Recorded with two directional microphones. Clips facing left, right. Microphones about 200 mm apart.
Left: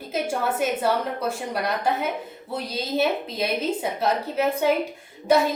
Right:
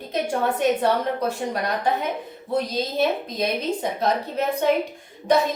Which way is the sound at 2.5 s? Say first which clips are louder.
Right 2 dB; 5° left (ahead or behind).